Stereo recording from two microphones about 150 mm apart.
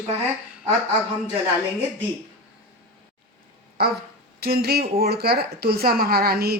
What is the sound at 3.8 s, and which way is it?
Speech, 90° right.